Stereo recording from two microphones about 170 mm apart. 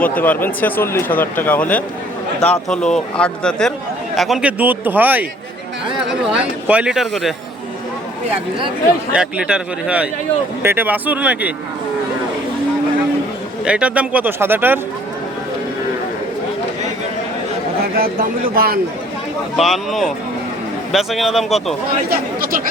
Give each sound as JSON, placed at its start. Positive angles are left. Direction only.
{"t": 0.0, "sound": "speech", "side_deg": 10}
{"t": 9.1, "sound": "speech", "side_deg": -5}
{"t": 13.7, "sound": "speech", "side_deg": -5}
{"t": 17.9, "sound": "speech", "side_deg": -60}
{"t": 19.5, "sound": "speech", "side_deg": 0}
{"t": 22.1, "sound": "speech", "side_deg": -60}